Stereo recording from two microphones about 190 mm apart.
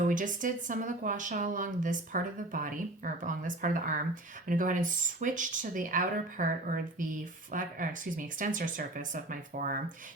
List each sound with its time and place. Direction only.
0.1 s speech: 45° right (ahead or behind)